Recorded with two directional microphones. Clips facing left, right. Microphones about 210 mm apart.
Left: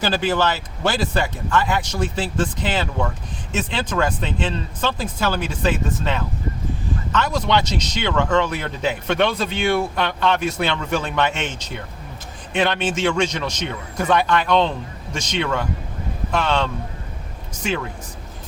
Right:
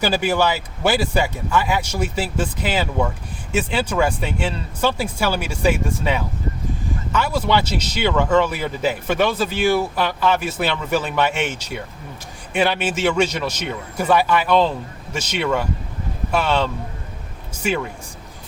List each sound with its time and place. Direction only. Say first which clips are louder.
0.0 s speech: right 1 dB; 10° right (ahead or behind)
17.6 s speech: right 2 dB; 5° right (ahead or behind)